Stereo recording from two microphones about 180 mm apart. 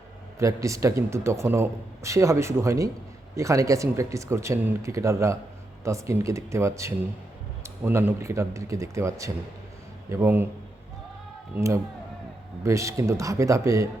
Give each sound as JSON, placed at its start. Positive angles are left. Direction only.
{"t": 0.3, "sound": "a man's voice", "side_deg": -15}
{"t": 11.5, "sound": "a man's voice", "side_deg": -15}